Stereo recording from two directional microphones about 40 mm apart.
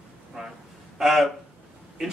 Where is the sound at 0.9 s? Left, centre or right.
Centre.